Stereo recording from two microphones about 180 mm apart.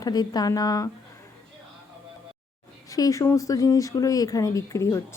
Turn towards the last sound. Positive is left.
turn(degrees=15)  # may be behind; listen again after turning